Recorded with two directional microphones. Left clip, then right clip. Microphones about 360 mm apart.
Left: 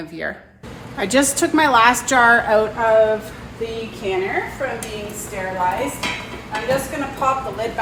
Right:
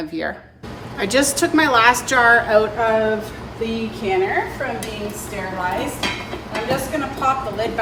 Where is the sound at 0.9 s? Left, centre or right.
Centre.